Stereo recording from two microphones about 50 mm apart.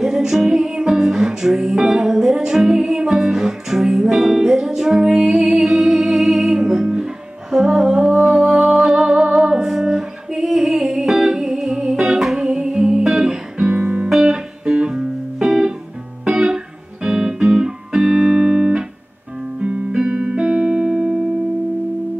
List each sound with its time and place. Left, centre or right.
0.0 s music: centre
7.5 s humming: centre
13.2 s music: centre
13.7 s music: right
14.0 s music: centre
14.6 s music: centre
19.6 s music: right